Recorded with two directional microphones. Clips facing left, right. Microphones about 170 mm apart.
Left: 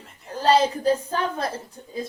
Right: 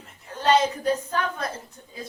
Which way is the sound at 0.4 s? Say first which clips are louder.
Left 2 dB; 30° left (ahead or behind).